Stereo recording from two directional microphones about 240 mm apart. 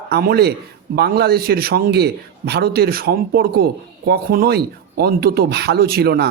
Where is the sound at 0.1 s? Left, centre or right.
Right.